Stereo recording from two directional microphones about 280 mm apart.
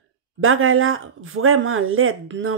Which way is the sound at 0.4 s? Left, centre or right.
Right.